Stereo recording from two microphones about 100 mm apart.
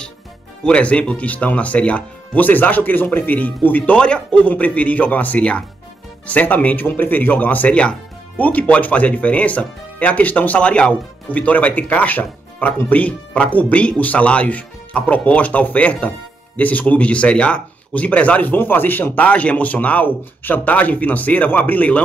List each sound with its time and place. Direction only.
0.7 s speech: 10° left (ahead or behind)